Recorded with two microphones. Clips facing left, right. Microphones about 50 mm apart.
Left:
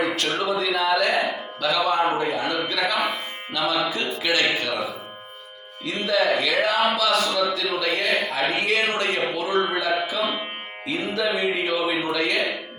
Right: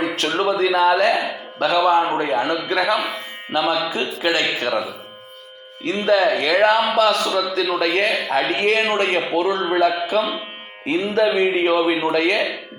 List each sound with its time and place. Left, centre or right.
0.0 s a sound: right
0.4 s speech: right
3.5 s speech: right
5.8 s speech: right